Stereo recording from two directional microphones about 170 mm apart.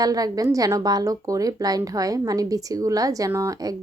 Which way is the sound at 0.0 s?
20° right (ahead or behind).